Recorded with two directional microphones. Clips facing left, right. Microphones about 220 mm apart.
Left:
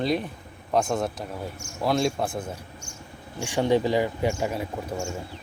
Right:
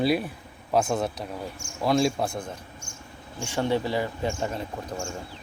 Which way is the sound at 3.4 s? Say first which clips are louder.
Left 4 dB; 15° left (ahead or behind).